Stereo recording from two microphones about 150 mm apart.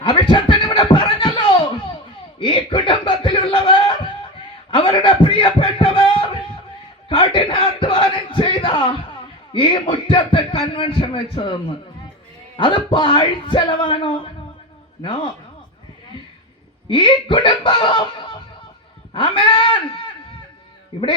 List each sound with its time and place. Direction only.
0.1 s beatboxing: 35° left (ahead or behind)
2.4 s a sound: 35° left (ahead or behind)
9.5 s speech: 35° left (ahead or behind)
12.5 s speech: 35° left (ahead or behind)
16.9 s speech: 35° left (ahead or behind)